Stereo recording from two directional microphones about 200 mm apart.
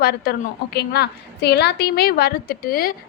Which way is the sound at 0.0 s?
50° left (ahead or behind).